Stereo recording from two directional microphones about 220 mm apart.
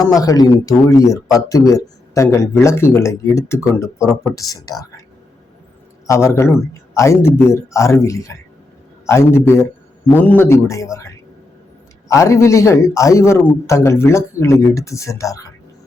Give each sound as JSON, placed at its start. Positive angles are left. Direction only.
{"t": 0.0, "sound": "speech", "side_deg": 15}
{"t": 4.0, "sound": "speech", "side_deg": 0}
{"t": 4.4, "sound": "speech", "side_deg": 15}
{"t": 6.1, "sound": "speech", "side_deg": 10}